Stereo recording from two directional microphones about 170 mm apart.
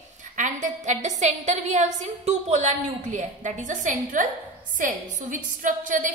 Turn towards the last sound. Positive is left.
turn(degrees=-50)  # may be behind; listen again after turning